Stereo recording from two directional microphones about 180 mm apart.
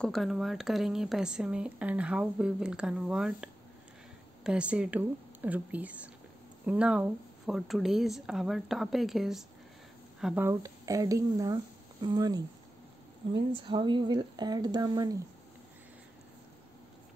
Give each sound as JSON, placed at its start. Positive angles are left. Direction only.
{"t": 0.0, "sound": "speech", "side_deg": 0}